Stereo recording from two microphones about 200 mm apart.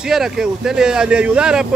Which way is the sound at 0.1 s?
Centre (ahead or behind).